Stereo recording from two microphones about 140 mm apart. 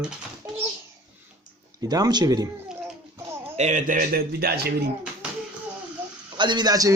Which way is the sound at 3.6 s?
60° right (ahead or behind).